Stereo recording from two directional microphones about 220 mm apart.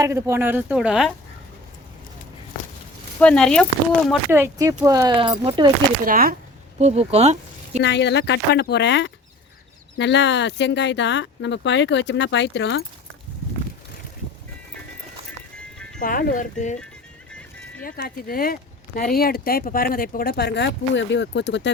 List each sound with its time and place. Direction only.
0.0 s speech: 15° right (ahead or behind)
3.2 s speech: 5° left (ahead or behind)
4.3 s speech: 10° right (ahead or behind)
6.1 s speech: 40° right (ahead or behind)
6.7 s speech: 30° right (ahead or behind)
7.8 s speech: 50° left (ahead or behind)
15.5 s music: 5° left (ahead or behind)
16.0 s speech: 40° left (ahead or behind)
17.8 s speech: 45° left (ahead or behind)